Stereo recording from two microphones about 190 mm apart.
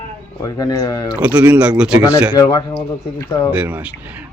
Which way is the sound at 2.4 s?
20° left (ahead or behind).